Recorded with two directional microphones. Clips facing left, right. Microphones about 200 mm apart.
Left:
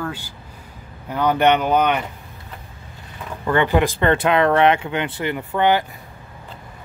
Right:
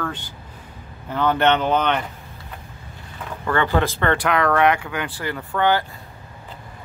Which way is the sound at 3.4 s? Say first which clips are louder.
Left 3 dB; 15° left (ahead or behind).